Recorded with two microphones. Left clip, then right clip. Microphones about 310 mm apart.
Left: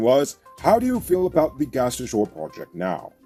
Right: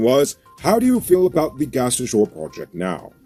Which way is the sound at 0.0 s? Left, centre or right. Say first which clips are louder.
Right 2 dB; centre.